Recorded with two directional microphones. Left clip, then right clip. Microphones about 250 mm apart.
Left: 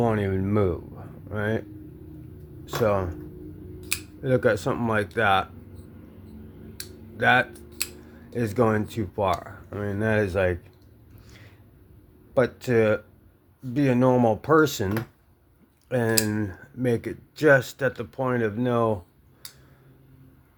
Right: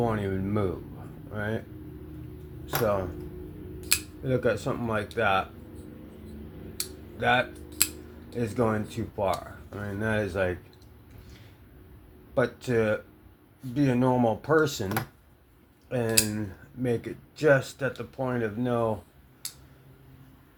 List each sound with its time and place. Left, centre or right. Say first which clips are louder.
0.0 s speech: left 4 dB; left
2.8 s speech: left 4 dB; left
4.2 s speech: left 7 dB; left
7.2 s speech: left 4 dB; left
12.3 s speech: left 4 dB; left
15.9 s speech: left 3 dB; left